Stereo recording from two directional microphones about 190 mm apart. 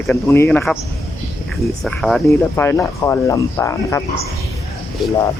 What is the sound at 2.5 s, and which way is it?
Speech, 15° left (ahead or behind).